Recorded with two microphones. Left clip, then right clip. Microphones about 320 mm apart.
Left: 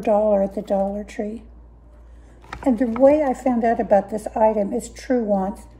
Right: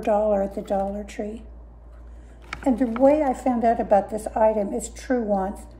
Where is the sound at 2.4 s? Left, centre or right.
Left.